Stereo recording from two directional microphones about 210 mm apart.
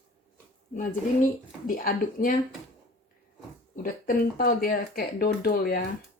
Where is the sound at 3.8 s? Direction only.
40° left (ahead or behind).